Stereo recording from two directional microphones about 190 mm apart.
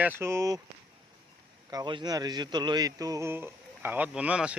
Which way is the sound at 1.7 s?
25° right (ahead or behind).